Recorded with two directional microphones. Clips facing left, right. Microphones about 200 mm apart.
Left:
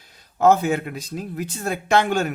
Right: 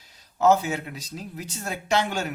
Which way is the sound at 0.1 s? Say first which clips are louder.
Left 3 dB; 55° left (ahead or behind).